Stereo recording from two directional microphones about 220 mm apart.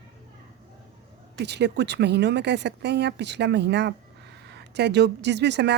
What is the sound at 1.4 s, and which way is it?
Speech, 50° right (ahead or behind).